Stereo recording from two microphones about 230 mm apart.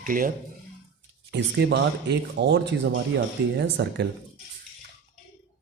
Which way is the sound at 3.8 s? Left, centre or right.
Right.